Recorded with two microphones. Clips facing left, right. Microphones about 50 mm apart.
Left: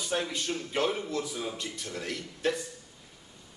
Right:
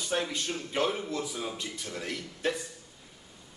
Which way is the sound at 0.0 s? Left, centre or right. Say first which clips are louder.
Even; centre.